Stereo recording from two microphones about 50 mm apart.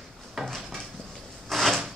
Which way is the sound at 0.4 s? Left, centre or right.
Centre.